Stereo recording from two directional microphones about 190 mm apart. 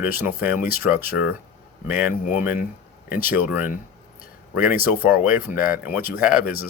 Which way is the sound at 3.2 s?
10° right (ahead or behind).